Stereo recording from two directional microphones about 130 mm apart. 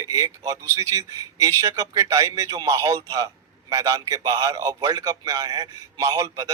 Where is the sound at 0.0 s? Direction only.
25° right (ahead or behind).